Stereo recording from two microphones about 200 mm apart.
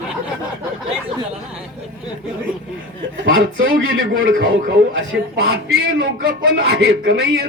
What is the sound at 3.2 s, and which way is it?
A man's voice, 80° right.